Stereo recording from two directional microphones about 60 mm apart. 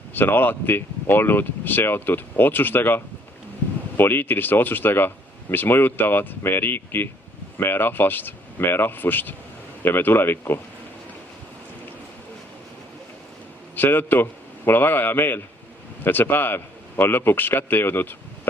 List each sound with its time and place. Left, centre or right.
0.1 s speech: left
13.7 s a man's voice: left